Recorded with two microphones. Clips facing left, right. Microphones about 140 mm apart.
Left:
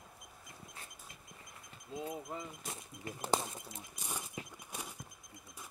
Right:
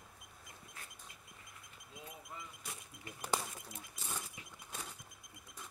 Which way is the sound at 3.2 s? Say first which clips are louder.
Left 4 dB; 25° left (ahead or behind).